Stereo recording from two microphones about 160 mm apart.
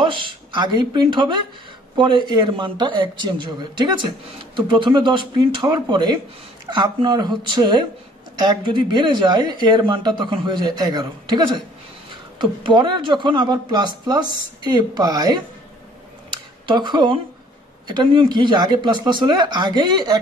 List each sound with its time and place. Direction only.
0.0 s speech: 30° right (ahead or behind)
16.3 s a sound: 30° right (ahead or behind)
17.8 s speech: 30° right (ahead or behind)